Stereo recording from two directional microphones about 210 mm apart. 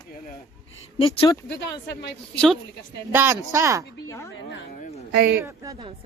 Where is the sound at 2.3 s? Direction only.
5° left (ahead or behind).